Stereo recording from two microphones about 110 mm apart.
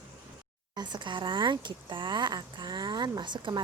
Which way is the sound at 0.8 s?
45° right (ahead or behind).